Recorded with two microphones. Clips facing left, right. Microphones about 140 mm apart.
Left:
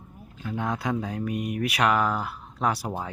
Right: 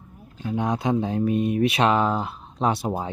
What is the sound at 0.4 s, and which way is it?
Speech, 20° right (ahead or behind).